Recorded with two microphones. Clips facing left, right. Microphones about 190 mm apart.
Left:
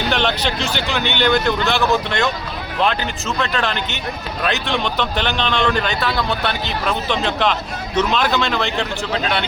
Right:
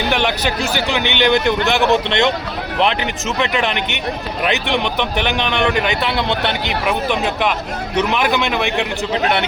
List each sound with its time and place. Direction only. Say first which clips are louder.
0.1 s a man's voice: even; 10° right (ahead or behind)